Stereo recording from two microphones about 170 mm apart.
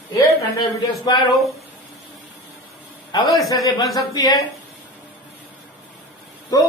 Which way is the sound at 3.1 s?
20° left (ahead or behind).